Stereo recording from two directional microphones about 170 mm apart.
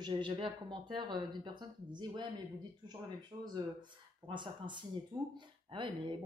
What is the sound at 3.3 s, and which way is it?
Speech, 20° right (ahead or behind).